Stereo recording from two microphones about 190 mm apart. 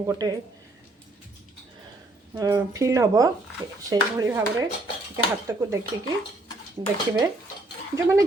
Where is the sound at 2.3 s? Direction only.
20° right (ahead or behind).